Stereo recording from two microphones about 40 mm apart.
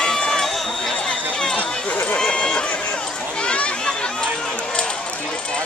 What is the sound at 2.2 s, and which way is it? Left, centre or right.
Run, left.